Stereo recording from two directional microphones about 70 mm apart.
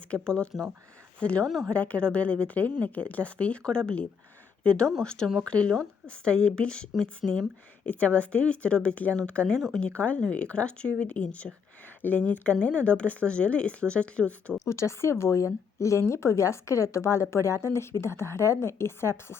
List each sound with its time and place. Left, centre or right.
0.1 s a woman's voice: centre
9.6 s speech: centre
9.8 s speech: centre
14.6 s a woman's voice: left